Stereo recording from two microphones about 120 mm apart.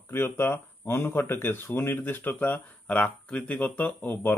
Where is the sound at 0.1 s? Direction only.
20° left (ahead or behind).